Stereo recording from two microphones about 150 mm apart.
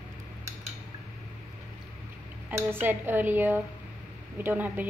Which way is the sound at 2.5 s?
15° right (ahead or behind).